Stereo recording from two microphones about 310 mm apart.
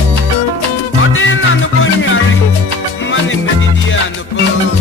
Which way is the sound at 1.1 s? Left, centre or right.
Left.